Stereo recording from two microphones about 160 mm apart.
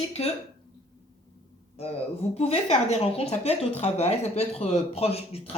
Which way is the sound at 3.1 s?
40° left (ahead or behind).